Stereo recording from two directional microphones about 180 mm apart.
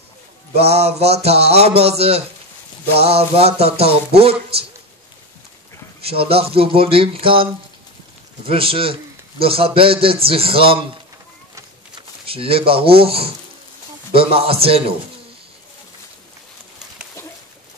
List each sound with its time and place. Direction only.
0.6 s a man's voice: 35° right (ahead or behind)
5.9 s a man's voice: 30° right (ahead or behind)
8.5 s a man's voice: 30° right (ahead or behind)
12.3 s a man's voice: 30° right (ahead or behind)